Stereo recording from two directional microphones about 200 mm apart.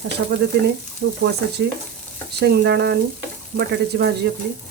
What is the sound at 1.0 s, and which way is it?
Speech, 50° right (ahead or behind).